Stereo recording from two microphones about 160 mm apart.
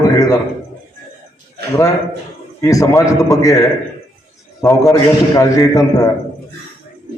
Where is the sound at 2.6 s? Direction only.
20° left (ahead or behind).